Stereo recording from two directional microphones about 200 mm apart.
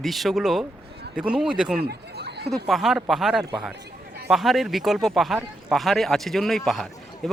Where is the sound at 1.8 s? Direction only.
55° right (ahead or behind).